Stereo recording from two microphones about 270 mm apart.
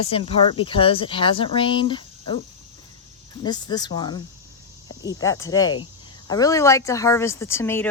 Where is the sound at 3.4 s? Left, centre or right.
Centre.